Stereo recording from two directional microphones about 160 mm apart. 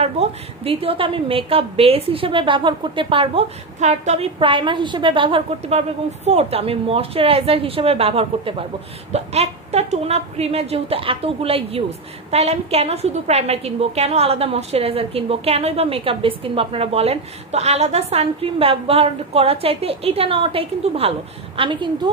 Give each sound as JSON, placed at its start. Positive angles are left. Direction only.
{"t": 0.0, "sound": "a woman's voice", "side_deg": -40}